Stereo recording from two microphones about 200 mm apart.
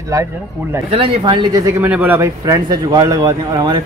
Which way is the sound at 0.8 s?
25° right (ahead or behind).